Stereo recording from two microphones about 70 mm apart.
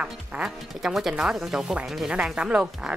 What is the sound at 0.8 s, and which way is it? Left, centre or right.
A woman's voice, centre.